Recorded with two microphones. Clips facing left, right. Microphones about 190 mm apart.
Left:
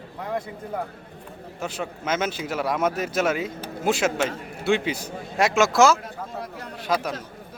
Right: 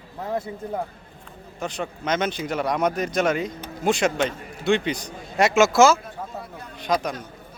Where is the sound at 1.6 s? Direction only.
5° left (ahead or behind).